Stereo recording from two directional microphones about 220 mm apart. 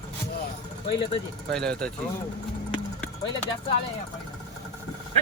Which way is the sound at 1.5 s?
5° left (ahead or behind).